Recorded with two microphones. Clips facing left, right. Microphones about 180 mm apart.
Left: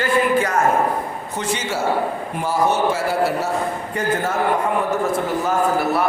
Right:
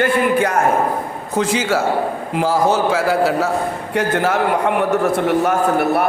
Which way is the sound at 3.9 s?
75° right (ahead or behind).